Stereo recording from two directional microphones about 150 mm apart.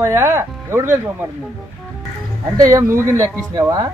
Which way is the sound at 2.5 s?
20° right (ahead or behind).